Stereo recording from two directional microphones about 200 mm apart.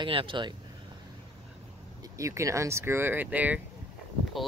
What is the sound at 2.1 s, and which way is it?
Speech, 15° right (ahead or behind).